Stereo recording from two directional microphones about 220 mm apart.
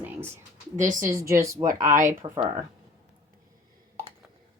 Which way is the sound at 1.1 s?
15° right (ahead or behind).